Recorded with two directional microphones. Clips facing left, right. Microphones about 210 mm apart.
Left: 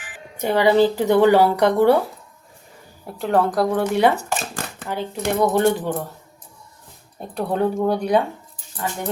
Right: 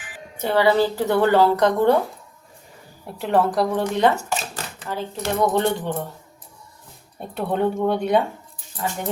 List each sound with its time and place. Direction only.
0.3 s speech: 15° left (ahead or behind)
3.2 s speech: centre (ahead or behind)
4.2 s shuffling cards: 50° left (ahead or behind)
4.9 s speech: 15° left (ahead or behind)
7.3 s speech: centre (ahead or behind)